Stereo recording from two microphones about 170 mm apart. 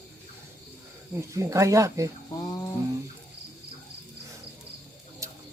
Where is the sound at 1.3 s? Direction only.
20° right (ahead or behind).